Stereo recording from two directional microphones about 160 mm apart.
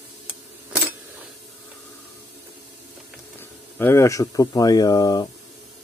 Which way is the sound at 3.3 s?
10° left (ahead or behind).